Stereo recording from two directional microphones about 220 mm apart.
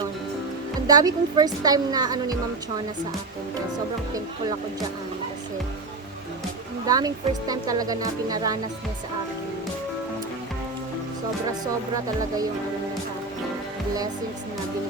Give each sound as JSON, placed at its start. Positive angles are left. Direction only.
{"t": 0.9, "sound": "speech", "side_deg": -15}
{"t": 6.8, "sound": "speech", "side_deg": -15}